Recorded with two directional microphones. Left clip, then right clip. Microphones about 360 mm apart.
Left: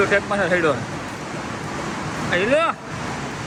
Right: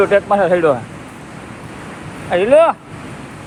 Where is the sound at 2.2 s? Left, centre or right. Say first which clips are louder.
Right 8 dB; centre.